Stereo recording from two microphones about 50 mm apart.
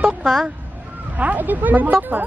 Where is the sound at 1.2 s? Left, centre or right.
Right.